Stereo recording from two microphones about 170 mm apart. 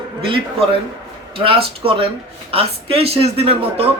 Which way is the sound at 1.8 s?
30° right (ahead or behind).